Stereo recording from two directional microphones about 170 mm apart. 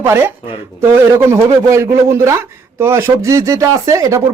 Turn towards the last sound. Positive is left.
turn(degrees=-20)  # may be behind; listen again after turning